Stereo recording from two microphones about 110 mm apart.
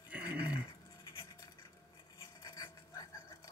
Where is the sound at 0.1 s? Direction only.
10° right (ahead or behind).